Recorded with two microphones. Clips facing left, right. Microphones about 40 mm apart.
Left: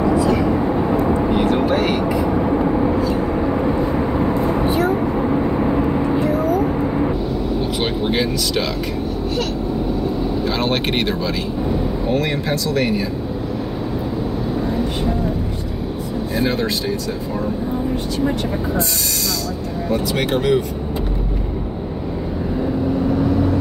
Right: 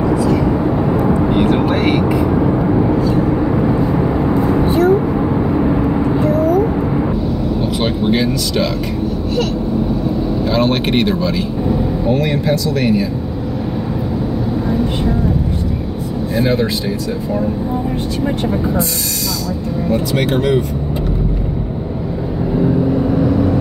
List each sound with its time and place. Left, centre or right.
0.0 s vehicle: centre
1.3 s vehicle: right
2.7 s vehicle: centre
7.8 s a sound: centre
10.4 s speech: centre
16.3 s speech: centre
20.2 s speech: centre